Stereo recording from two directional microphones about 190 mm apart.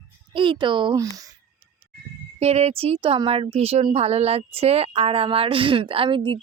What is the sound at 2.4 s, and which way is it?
Speech, 35° right (ahead or behind).